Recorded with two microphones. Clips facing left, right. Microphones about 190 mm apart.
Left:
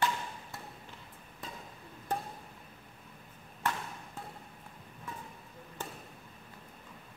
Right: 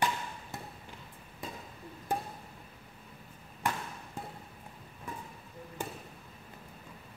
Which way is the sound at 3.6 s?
10° right (ahead or behind).